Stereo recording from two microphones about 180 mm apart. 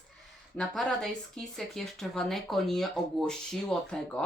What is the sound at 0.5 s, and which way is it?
Speech, centre (ahead or behind).